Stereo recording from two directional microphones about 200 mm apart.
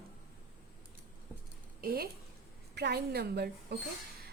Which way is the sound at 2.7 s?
55° right (ahead or behind).